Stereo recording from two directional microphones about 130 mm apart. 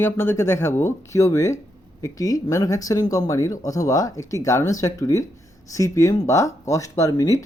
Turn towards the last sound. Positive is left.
turn(degrees=25)  # may be behind; listen again after turning